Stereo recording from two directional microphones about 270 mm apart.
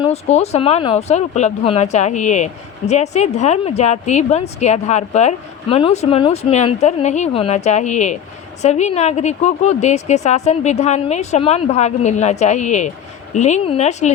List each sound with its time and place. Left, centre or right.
0.0 s speech: left